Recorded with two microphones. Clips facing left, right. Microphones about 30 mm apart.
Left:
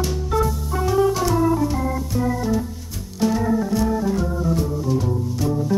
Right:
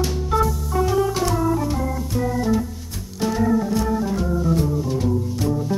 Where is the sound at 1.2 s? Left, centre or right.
Centre.